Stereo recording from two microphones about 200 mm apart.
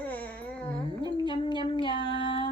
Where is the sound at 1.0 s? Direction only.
25° left (ahead or behind).